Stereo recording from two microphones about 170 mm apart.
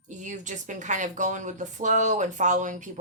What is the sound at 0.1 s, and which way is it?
Speech, 45° right (ahead or behind).